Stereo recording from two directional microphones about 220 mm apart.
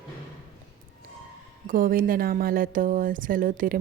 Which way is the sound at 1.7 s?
40° right (ahead or behind).